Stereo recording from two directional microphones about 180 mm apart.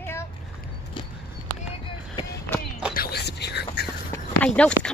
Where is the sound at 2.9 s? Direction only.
60° left (ahead or behind).